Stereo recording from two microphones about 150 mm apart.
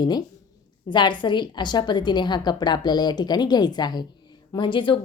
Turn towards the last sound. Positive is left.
turn(degrees=30)  # may be behind; listen again after turning